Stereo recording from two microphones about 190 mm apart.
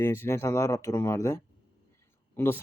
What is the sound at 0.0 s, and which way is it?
Speech, 10° left (ahead or behind).